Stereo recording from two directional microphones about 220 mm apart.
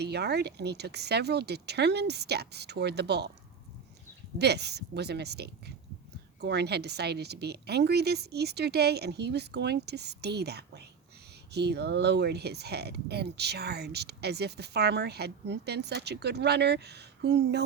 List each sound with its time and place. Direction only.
0.0 s speech: 50° right (ahead or behind)
4.4 s speech: 50° right (ahead or behind)